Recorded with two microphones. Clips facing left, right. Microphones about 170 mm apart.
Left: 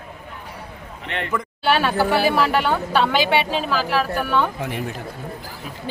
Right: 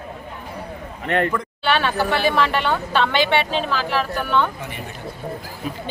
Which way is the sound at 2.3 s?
5° left (ahead or behind).